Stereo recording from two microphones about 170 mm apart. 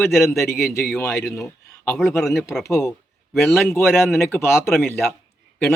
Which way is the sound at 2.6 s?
20° left (ahead or behind).